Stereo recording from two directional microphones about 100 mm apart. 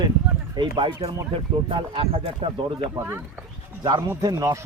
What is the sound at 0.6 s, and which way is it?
Speech, 55° right (ahead or behind).